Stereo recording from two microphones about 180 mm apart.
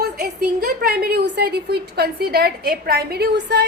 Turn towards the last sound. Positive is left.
turn(degrees=-65)  # may be behind; listen again after turning